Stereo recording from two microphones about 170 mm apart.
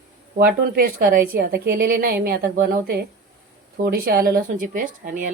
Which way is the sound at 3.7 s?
65° right (ahead or behind).